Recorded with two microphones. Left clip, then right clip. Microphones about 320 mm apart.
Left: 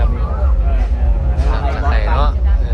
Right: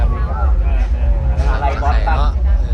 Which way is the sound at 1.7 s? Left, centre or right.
Centre.